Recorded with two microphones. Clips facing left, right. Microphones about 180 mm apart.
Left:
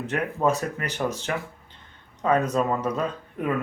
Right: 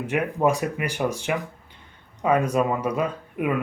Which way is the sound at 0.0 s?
10° right (ahead or behind).